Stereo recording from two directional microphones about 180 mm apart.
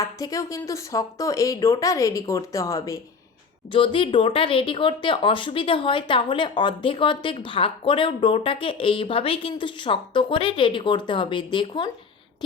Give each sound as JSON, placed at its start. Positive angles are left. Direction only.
{"t": 0.0, "sound": "speech", "side_deg": 20}
{"t": 3.7, "sound": "speech", "side_deg": 30}